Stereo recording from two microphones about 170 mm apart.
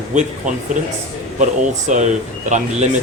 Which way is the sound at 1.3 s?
45° right (ahead or behind).